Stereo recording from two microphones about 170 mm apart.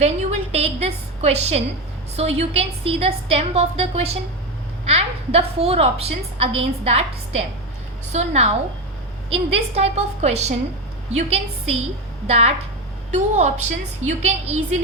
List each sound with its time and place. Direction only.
0.0 s a woman's voice: 40° right (ahead or behind)